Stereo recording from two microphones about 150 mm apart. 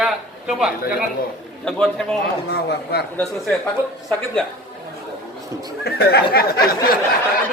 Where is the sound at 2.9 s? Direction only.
90° left.